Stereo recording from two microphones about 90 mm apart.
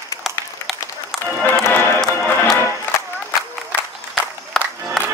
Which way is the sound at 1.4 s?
20° left (ahead or behind).